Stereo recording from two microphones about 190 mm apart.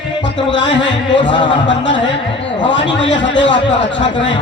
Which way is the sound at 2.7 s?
70° left (ahead or behind).